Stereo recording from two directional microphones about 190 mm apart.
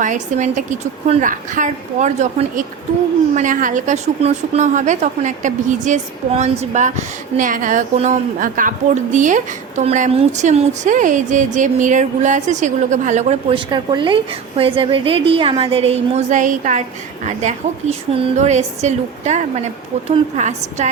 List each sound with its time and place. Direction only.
0.0 s a woman's voice: 40° right (ahead or behind)
13.7 s a woman's voice: 25° right (ahead or behind)